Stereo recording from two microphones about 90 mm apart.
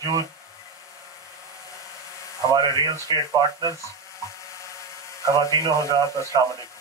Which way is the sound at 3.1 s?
50° right (ahead or behind).